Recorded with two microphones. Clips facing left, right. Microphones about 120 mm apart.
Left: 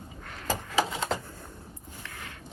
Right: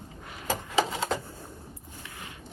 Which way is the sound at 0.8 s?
35° right (ahead or behind).